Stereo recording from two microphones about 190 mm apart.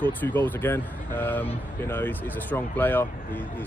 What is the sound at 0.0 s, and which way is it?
Speech, 10° left (ahead or behind).